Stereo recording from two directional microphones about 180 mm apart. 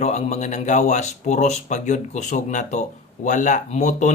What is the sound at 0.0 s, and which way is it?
Speech, 40° left (ahead or behind).